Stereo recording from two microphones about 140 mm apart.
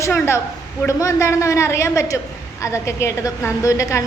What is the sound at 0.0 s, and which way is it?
A woman's voice, 20° left (ahead or behind).